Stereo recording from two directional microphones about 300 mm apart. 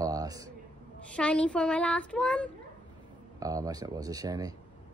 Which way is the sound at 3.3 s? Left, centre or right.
Centre.